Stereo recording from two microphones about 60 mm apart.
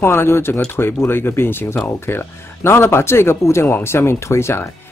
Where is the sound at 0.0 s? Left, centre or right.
Left.